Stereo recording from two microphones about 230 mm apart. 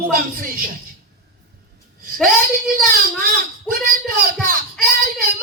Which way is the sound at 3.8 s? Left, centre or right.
Right.